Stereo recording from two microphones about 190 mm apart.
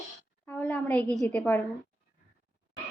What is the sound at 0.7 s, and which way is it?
Speech, 5° left (ahead or behind).